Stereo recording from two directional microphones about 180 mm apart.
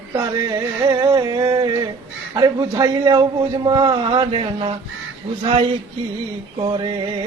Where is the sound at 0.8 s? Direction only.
20° right (ahead or behind).